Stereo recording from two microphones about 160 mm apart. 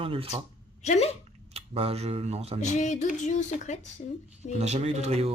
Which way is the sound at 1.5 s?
40° right (ahead or behind).